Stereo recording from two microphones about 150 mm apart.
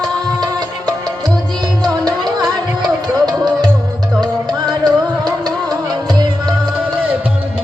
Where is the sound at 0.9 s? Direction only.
25° right (ahead or behind).